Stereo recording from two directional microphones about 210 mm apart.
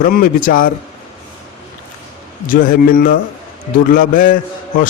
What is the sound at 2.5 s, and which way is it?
A man's voice, 40° left (ahead or behind).